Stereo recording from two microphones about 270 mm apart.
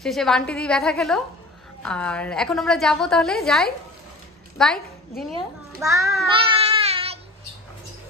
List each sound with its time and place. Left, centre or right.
0.0 s a woman's voice: centre
5.8 s a child's voice: centre
6.8 s child singing: right